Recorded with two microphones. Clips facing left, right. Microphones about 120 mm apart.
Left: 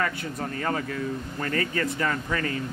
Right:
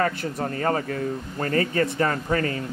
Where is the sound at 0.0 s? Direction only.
35° right (ahead or behind).